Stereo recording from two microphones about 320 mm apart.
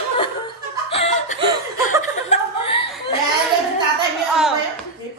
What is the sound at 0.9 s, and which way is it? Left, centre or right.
Laughter, left.